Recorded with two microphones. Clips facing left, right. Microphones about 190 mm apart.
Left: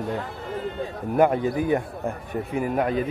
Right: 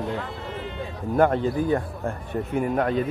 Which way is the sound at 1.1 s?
10° left (ahead or behind).